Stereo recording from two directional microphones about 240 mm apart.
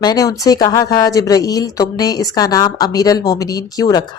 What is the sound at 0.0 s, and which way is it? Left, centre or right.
Speech, centre.